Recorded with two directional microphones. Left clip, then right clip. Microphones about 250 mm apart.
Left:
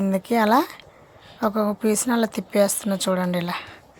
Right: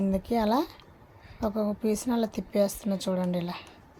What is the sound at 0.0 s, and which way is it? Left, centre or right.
Speech, centre.